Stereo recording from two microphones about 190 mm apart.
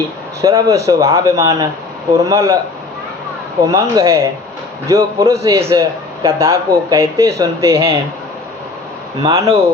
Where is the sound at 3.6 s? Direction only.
15° right (ahead or behind).